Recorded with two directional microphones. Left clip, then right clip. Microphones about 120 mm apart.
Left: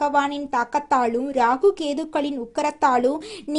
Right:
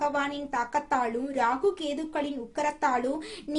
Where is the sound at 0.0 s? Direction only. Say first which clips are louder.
Left 7 dB; 50° left (ahead or behind).